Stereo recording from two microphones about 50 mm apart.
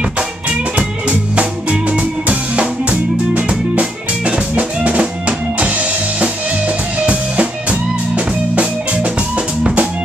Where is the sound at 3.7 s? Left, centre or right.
Right.